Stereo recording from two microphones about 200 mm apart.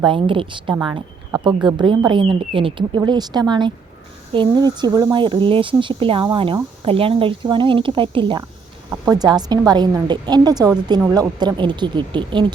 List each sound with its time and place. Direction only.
0.0 s speech: 25° right (ahead or behind)